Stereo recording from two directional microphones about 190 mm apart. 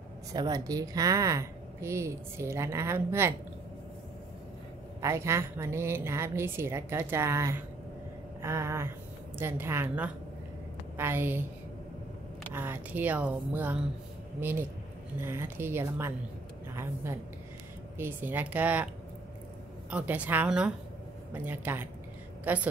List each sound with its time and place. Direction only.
0.3 s a woman's voice: 20° right (ahead or behind)
5.0 s a woman's voice: 15° right (ahead or behind)
8.4 s vehicle: 15° right (ahead or behind)
9.4 s a woman's voice: 10° right (ahead or behind)
12.5 s a woman's voice: 10° right (ahead or behind)
19.9 s a woman's voice: 5° right (ahead or behind)